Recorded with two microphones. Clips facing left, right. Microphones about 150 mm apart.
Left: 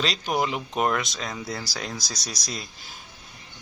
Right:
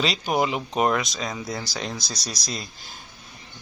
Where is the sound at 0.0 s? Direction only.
5° right (ahead or behind).